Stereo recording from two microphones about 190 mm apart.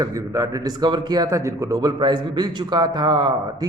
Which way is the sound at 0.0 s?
20° right (ahead or behind).